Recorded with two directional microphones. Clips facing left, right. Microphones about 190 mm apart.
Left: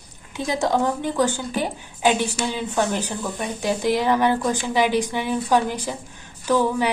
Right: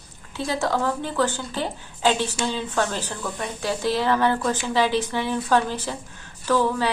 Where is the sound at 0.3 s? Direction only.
15° left (ahead or behind).